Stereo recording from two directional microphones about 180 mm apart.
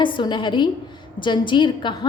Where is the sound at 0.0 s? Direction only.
25° left (ahead or behind).